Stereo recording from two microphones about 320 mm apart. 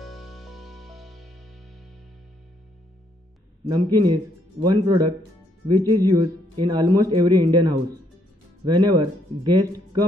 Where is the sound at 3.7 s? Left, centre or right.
Centre.